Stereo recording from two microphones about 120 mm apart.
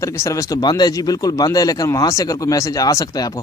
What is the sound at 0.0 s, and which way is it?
Speech, 25° left (ahead or behind).